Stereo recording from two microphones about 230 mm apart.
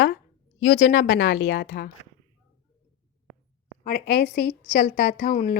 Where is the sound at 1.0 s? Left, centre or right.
Left.